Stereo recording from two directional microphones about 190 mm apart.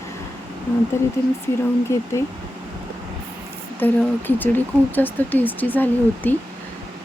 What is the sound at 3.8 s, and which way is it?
Speech, 10° left (ahead or behind).